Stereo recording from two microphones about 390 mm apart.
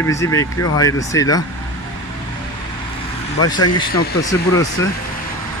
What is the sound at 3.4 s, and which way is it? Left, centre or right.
Speech, centre.